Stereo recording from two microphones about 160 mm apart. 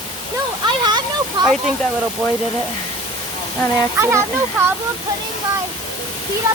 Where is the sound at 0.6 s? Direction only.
25° right (ahead or behind).